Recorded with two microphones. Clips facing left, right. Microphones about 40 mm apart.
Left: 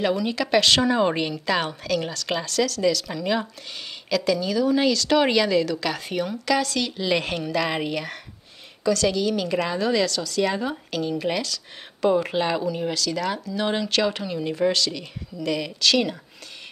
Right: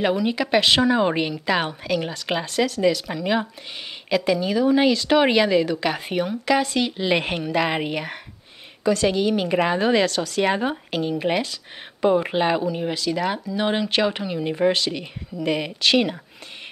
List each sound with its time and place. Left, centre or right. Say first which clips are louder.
0.0 s speech: right 2 dB; centre